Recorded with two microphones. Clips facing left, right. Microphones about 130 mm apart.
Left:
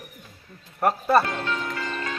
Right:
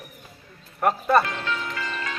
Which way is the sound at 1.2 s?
40° left (ahead or behind).